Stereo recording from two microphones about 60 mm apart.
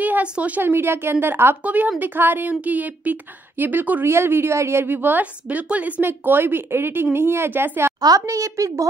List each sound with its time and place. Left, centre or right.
0.0 s speech: right
0.6 s a woman's voice: right
1.6 s a woman's voice: right
4.0 s a woman's voice: right
6.0 s a woman's voice: right
8.0 s a woman's voice: right